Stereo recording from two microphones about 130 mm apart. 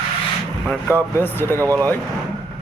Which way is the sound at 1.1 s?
15° left (ahead or behind).